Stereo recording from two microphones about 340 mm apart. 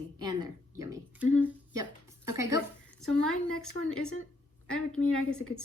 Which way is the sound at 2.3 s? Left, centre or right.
Centre.